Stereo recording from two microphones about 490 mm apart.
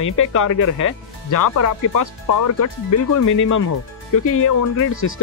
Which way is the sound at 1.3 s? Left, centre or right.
Left.